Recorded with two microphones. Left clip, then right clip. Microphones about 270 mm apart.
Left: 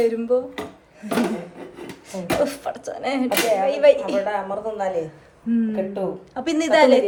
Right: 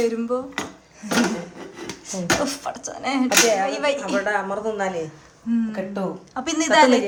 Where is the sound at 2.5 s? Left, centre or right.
Centre.